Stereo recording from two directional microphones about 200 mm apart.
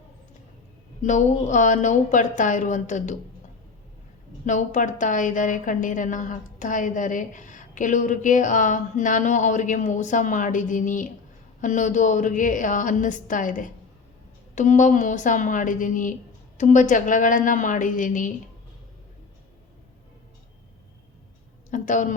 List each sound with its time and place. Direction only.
1.0 s a woman's voice: 40° left (ahead or behind)
4.4 s a woman's voice: 40° left (ahead or behind)
21.7 s a woman's voice: 40° left (ahead or behind)